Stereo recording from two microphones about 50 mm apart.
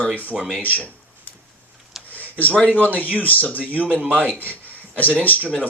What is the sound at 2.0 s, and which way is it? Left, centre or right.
Speech, left.